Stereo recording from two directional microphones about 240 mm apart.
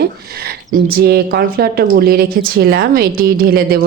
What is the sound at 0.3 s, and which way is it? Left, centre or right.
Speech, right.